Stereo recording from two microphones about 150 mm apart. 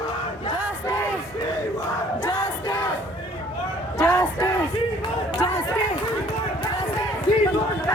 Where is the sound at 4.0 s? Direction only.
20° left (ahead or behind).